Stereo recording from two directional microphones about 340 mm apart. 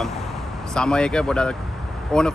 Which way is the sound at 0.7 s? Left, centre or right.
Centre.